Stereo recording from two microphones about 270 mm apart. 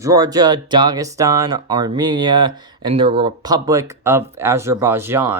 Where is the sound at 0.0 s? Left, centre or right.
Centre.